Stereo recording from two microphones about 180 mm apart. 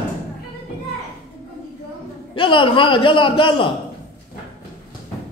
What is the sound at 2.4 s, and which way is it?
A man's voice, 30° left (ahead or behind).